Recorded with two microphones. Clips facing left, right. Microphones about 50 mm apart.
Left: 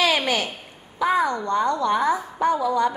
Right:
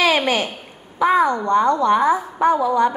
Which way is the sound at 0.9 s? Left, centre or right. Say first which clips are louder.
Right 5 dB; right.